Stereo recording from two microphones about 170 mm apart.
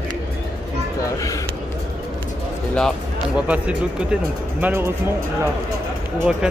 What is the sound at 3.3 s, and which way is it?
Speech, 10° right (ahead or behind).